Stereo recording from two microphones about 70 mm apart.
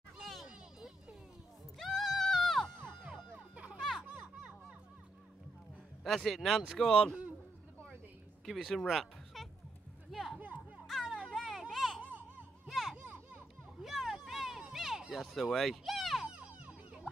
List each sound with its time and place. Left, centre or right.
0.2 s children playing: centre
1.8 s music: centre
3.1 s music: centre
6.0 s speech: centre
8.5 s speech: centre
10.1 s music: centre
11.2 s a sound: centre
16.3 s a sound: centre